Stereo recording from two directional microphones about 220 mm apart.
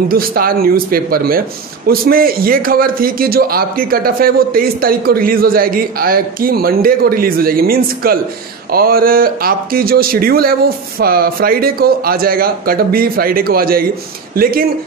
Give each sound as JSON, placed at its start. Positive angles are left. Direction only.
{"t": 0.1, "sound": "a man's voice", "side_deg": -40}